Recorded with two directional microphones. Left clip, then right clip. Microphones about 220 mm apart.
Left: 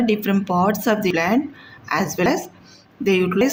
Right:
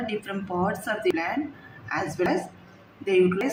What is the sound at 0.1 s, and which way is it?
Speech, 50° left (ahead or behind).